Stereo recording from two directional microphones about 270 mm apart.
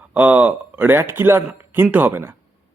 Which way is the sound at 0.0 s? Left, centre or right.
Centre.